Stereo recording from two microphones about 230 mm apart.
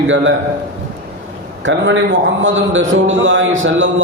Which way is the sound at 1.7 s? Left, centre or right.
Right.